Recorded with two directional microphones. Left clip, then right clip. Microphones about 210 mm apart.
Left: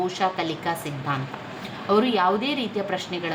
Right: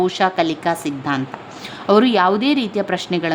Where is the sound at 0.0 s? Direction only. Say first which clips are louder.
Right 7 dB; 45° right (ahead or behind).